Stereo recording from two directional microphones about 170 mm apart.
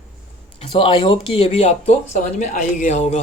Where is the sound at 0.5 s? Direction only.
30° left (ahead or behind).